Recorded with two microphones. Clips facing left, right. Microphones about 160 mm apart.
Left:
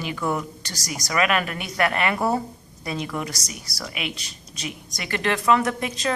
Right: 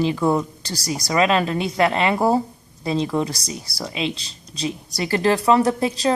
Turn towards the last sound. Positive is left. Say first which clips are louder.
# right 6 dB
turn(degrees=-35)  # may be behind; listen again after turning